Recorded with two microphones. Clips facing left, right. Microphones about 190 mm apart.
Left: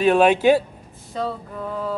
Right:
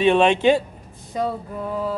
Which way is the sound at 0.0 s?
5° left (ahead or behind).